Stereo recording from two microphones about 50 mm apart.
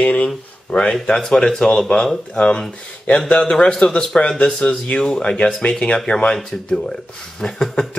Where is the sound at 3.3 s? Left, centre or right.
Left.